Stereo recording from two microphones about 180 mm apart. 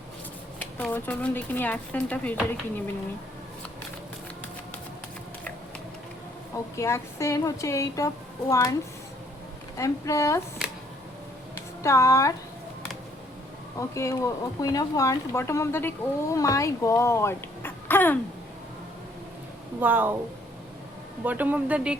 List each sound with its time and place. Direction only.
0.6 s speech: 10° left (ahead or behind)
6.7 s speech: 15° left (ahead or behind)
9.7 s speech: 15° left (ahead or behind)
11.5 s a sound: 15° left (ahead or behind)
13.7 s speech: 15° left (ahead or behind)
19.8 s speech: 10° right (ahead or behind)
21.2 s speech: 10° right (ahead or behind)